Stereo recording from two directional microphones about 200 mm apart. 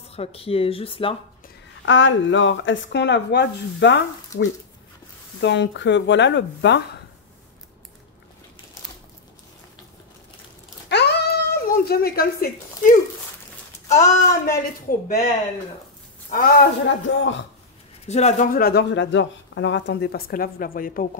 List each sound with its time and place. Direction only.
0.1 s speech: 30° left (ahead or behind)
1.9 s speech: 70° left (ahead or behind)
5.4 s speech: 60° left (ahead or behind)
10.9 s a sound: 55° left (ahead or behind)
13.9 s speech: 15° left (ahead or behind)
14.9 s speech: 45° left (ahead or behind)
16.3 s a man's voice: 45° left (ahead or behind)
16.8 s speech: 65° left (ahead or behind)
18.0 s speech: 35° left (ahead or behind)